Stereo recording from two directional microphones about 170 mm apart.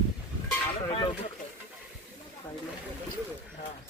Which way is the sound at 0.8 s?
30° left (ahead or behind).